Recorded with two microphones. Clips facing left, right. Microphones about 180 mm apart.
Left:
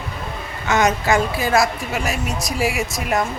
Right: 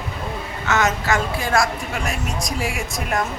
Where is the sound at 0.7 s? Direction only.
15° left (ahead or behind).